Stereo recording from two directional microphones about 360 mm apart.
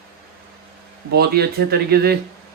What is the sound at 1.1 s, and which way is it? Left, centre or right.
Speech, right.